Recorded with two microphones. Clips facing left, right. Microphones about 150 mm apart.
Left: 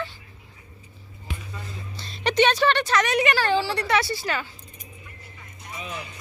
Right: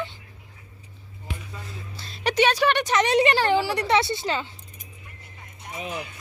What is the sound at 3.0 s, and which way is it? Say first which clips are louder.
A woman's voice: right 3 dB; 30° right (ahead or behind).